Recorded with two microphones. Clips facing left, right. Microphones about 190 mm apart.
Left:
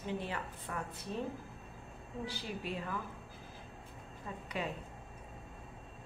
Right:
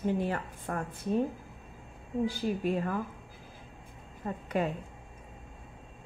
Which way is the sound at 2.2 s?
45° right (ahead or behind).